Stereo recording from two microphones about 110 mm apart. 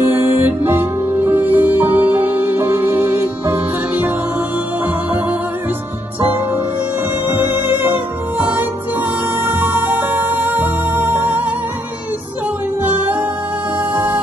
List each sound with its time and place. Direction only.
0.0 s music: 20° right (ahead or behind)
7.2 s music: 20° right (ahead or behind)
9.5 s music: 15° right (ahead or behind)
13.9 s music: 15° right (ahead or behind)